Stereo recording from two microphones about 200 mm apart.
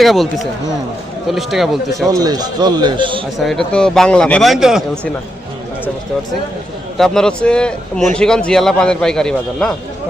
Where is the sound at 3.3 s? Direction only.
Centre (ahead or behind).